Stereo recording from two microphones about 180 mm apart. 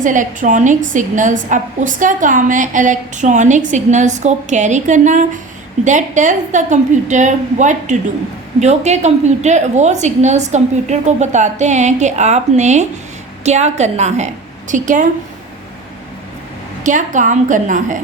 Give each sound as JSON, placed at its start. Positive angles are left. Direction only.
{"t": 0.0, "sound": "a woman's voice", "side_deg": -45}
{"t": 16.8, "sound": "a woman's voice", "side_deg": -45}